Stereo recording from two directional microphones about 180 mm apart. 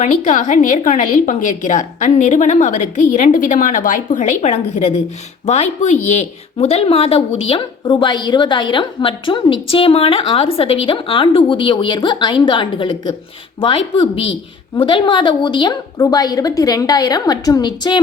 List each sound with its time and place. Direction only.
0.0 s a woman's voice: 45° left (ahead or behind); by 18.0 s 25° left (ahead or behind)